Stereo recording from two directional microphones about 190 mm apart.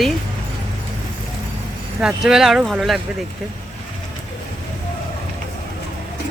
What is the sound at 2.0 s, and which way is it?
Speech, 5° right (ahead or behind).